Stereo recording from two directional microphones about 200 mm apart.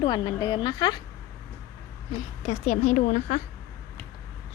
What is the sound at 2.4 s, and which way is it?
Speech, 35° left (ahead or behind).